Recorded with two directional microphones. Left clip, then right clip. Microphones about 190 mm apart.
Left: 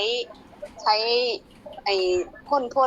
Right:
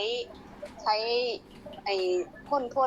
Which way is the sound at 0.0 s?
25° left (ahead or behind).